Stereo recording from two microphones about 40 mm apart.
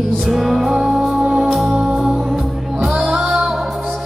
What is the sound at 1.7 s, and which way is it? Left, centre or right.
Music, right.